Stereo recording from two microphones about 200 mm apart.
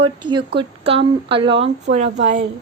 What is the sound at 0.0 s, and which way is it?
Speech, 25° right (ahead or behind).